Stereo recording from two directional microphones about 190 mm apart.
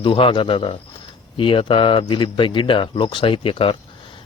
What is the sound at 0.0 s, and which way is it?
Speech, 25° left (ahead or behind).